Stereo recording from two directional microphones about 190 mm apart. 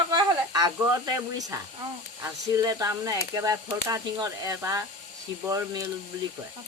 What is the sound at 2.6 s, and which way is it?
Speech, 15° right (ahead or behind).